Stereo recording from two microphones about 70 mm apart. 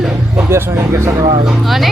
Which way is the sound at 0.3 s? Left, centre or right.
Right.